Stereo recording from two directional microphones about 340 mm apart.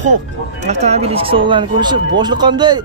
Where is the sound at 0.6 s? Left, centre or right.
Centre.